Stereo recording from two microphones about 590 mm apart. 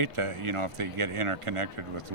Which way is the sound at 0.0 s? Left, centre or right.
Right.